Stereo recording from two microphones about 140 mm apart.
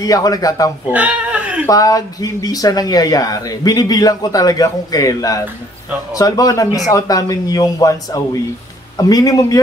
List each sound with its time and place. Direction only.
0.0 s speech: 25° left (ahead or behind)
0.9 s a sound: 10° right (ahead or behind)
1.7 s speech: 25° left (ahead or behind)